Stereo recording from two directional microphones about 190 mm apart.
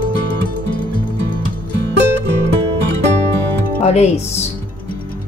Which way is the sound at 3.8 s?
35° left (ahead or behind).